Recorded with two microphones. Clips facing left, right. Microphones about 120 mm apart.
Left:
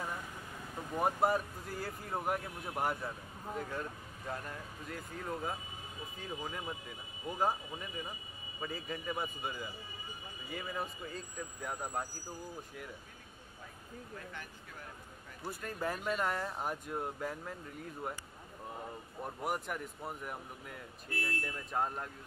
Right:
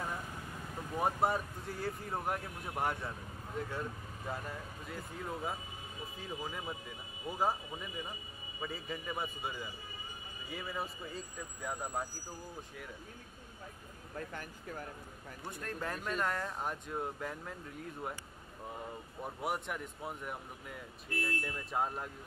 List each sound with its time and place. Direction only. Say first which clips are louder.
0.9 s speech: left 1 dB; centre (ahead or behind)
14.3 s speech: right 5 dB; 45° right (ahead or behind)
15.4 s speech: left 3 dB; 5° left (ahead or behind)
19.2 s speech: even; centre (ahead or behind)